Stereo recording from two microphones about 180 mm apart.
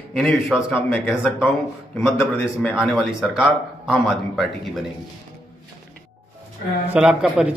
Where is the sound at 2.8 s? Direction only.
Centre (ahead or behind).